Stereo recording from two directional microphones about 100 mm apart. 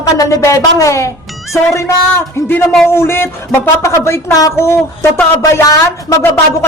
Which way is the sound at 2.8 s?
25° left (ahead or behind).